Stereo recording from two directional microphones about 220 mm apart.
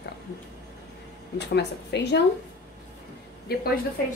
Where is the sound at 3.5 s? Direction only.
45° left (ahead or behind).